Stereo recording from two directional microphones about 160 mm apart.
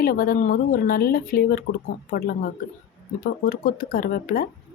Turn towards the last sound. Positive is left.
turn(degrees=65)  # may be behind; listen again after turning